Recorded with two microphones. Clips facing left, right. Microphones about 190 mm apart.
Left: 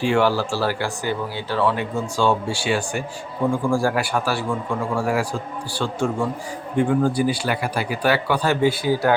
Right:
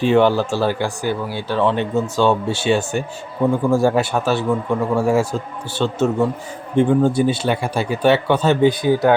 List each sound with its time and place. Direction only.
0.0 s a man's voice: 20° right (ahead or behind)
1.0 s speech: 15° left (ahead or behind)
1.5 s a man's voice: 20° right (ahead or behind)